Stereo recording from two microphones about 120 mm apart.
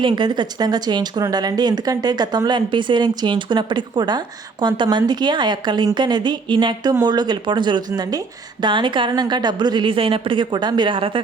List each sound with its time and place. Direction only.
0.0 s a woman's voice: 40° right (ahead or behind)